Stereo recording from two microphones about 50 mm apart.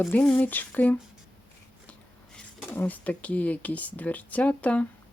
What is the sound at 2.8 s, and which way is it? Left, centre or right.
Speech, left.